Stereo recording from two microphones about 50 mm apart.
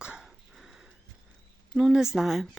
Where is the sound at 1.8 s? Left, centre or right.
Centre.